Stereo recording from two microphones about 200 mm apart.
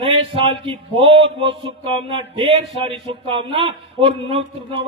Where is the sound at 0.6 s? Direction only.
25° right (ahead or behind).